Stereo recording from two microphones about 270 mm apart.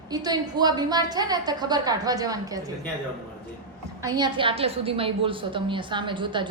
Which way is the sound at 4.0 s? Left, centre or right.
Centre.